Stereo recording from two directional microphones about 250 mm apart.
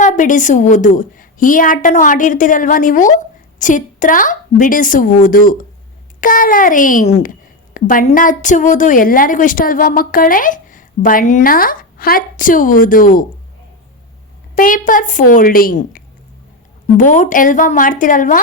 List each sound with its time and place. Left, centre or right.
0.0 s a woman's voice: left
14.5 s a woman's voice: left